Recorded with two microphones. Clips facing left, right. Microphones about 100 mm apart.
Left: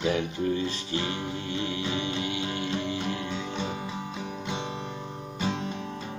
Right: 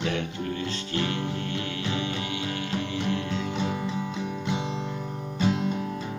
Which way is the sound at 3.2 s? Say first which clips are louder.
Right 3 dB; centre (ahead or behind).